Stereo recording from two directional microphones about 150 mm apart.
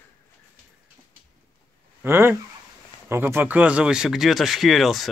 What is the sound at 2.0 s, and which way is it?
Speech, 15° right (ahead or behind).